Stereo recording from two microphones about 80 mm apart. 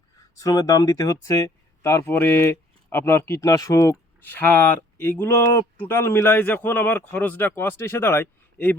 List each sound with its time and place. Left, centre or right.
0.3 s speech: left
3.4 s speech: left
4.2 s speech: left